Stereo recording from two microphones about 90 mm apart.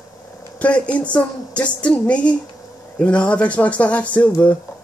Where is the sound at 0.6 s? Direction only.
15° left (ahead or behind).